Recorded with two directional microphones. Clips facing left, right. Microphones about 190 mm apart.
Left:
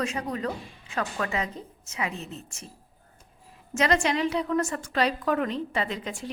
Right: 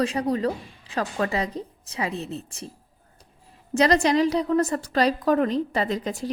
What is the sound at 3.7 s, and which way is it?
A woman's voice, 35° right (ahead or behind).